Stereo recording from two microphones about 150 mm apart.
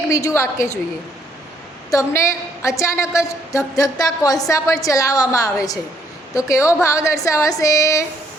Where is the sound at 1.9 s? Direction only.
20° left (ahead or behind).